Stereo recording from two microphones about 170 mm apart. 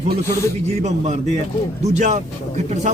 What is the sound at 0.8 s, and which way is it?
A man's voice, 40° right (ahead or behind).